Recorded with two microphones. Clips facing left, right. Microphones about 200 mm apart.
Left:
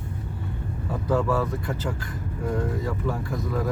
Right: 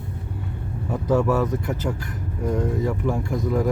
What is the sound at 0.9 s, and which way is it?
Speech, 20° right (ahead or behind).